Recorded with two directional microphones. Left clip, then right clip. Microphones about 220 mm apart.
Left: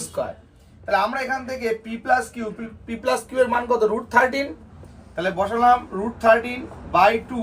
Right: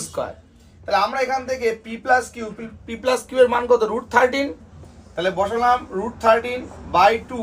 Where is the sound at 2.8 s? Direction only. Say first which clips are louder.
Right 2 dB; 15° right (ahead or behind).